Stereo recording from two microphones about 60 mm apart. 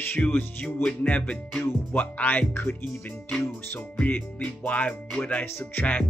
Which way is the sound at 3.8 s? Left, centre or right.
Left.